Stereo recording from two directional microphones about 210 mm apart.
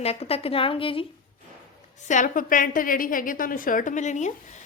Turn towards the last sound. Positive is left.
turn(degrees=35)  # may be behind; listen again after turning